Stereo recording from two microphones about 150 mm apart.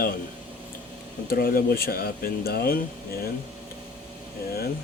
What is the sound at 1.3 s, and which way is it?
Speech, 75° left (ahead or behind).